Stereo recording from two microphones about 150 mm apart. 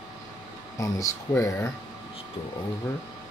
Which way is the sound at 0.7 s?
20° left (ahead or behind).